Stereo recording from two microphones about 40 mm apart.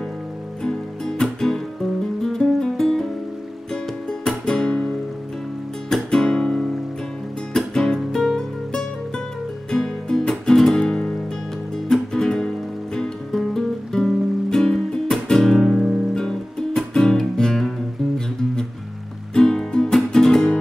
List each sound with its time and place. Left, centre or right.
1.2 s music: centre
4.5 s music: centre
6.0 s guitar: centre
7.5 s music: centre
10.9 s music: centre